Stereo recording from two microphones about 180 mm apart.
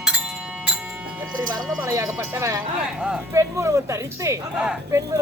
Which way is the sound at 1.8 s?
20° right (ahead or behind).